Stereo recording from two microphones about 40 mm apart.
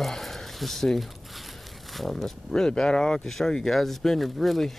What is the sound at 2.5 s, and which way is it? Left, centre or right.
Speech, centre.